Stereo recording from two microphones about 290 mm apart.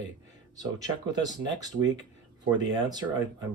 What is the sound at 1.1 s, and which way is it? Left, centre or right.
Speech, centre.